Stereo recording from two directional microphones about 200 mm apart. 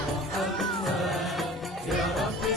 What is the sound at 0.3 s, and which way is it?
Music, centre (ahead or behind).